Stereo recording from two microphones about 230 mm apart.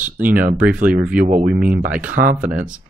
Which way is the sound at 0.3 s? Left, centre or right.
Right.